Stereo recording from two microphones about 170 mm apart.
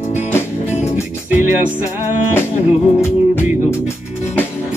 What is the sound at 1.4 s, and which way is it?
Music, 10° right (ahead or behind).